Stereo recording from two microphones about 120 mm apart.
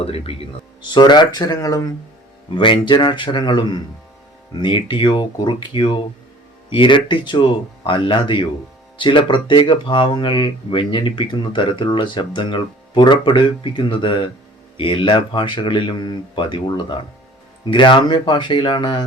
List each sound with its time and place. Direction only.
0.0 s speech: 55° left (ahead or behind)
0.8 s speech: 40° left (ahead or behind)
2.6 s speech: 40° left (ahead or behind)